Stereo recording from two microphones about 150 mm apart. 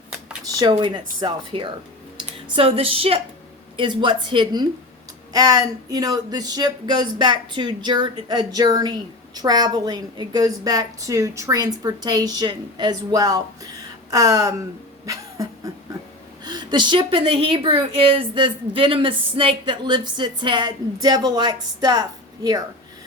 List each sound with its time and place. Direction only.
0.4 s a woman's voice: 30° right (ahead or behind)
15.0 s a sound: 25° right (ahead or behind)
16.4 s a woman's voice: 30° right (ahead or behind)